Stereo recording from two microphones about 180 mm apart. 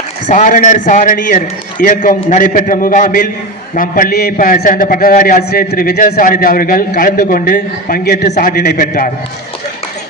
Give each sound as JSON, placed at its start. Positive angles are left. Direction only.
{"t": 0.3, "sound": "a man's voice", "side_deg": 45}